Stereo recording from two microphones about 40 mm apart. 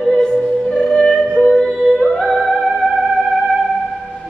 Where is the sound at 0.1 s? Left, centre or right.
Centre.